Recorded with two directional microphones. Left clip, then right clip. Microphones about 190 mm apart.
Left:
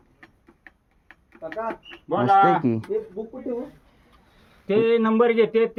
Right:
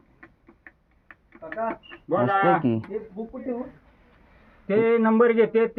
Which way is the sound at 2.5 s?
20° left (ahead or behind).